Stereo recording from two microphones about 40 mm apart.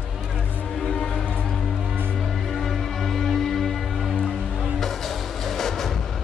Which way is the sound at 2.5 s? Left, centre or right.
Centre.